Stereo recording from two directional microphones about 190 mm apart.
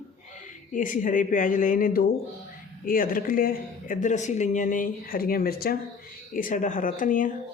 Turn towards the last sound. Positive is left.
turn(degrees=45)  # may be behind; listen again after turning